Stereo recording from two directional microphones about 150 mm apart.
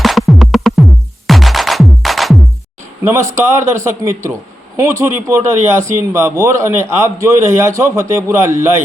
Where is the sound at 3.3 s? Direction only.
20° right (ahead or behind).